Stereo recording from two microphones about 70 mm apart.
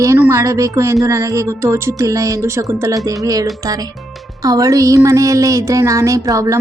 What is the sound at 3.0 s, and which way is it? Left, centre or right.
Speech, right.